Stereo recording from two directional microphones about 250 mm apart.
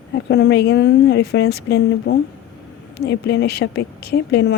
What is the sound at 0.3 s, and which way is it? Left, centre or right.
A woman's voice, left.